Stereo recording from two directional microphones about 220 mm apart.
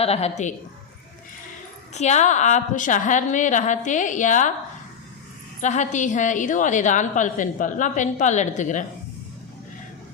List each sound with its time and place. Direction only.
0.0 s a woman's voice: 30° left (ahead or behind)
1.9 s a woman's voice: 30° left (ahead or behind)
5.6 s a woman's voice: 35° left (ahead or behind)